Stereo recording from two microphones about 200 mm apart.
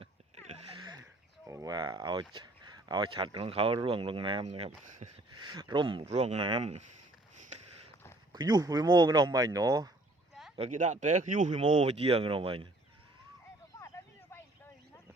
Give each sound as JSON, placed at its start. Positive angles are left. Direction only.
{"t": 0.0, "sound": "a sound", "side_deg": -30}
{"t": 0.8, "sound": "a sound", "side_deg": -20}
{"t": 2.3, "sound": "speech", "side_deg": -20}
{"t": 5.4, "sound": "speech", "side_deg": -20}
{"t": 8.3, "sound": "speech", "side_deg": -20}
{"t": 10.6, "sound": "speech", "side_deg": -40}
{"t": 13.7, "sound": "vehicle", "side_deg": 10}